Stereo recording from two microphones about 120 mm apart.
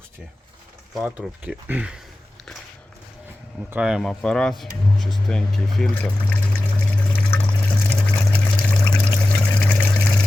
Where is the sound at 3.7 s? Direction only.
5° right (ahead or behind).